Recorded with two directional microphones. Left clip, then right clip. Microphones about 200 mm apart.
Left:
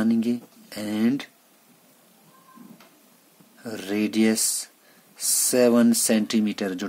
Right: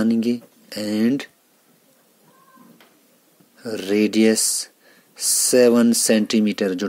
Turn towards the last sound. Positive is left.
turn(degrees=-20)  # may be behind; listen again after turning